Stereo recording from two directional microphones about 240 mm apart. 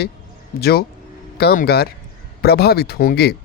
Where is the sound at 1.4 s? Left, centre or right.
Left.